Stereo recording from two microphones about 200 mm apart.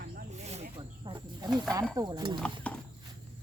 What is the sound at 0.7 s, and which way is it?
Snake, 20° right (ahead or behind).